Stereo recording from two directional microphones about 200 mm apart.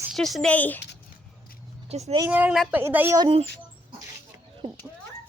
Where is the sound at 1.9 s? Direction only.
30° right (ahead or behind).